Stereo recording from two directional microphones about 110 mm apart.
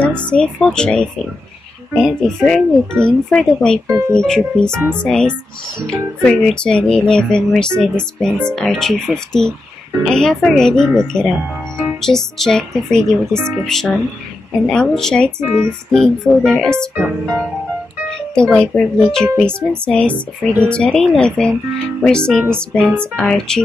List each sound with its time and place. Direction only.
0.3 s speech: 5° left (ahead or behind)
3.8 s speech: 25° right (ahead or behind)
4.2 s speech: 5° left (ahead or behind)
18.3 s speech: 5° left (ahead or behind)